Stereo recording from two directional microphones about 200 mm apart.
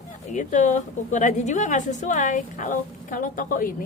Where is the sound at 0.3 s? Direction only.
35° left (ahead or behind).